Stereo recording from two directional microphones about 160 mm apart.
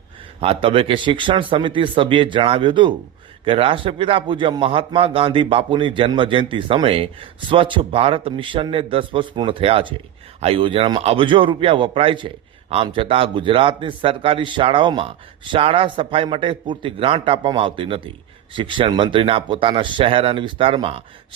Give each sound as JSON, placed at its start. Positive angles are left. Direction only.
{"t": 0.3, "sound": "a man's voice", "side_deg": -35}